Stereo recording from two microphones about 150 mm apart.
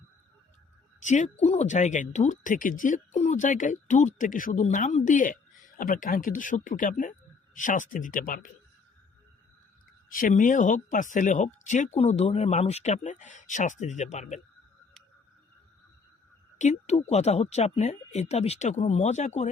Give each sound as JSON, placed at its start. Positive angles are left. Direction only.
{"t": 1.0, "sound": "speech", "side_deg": 55}
{"t": 10.1, "sound": "speech", "side_deg": 65}
{"t": 16.6, "sound": "speech", "side_deg": 50}